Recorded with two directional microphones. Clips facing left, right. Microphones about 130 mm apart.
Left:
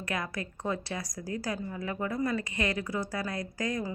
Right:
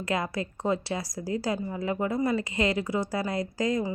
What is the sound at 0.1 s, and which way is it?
Speech, 25° right (ahead or behind).